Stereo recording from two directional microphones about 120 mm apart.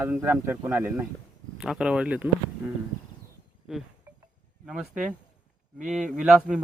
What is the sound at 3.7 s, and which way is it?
Speech, 5° right (ahead or behind).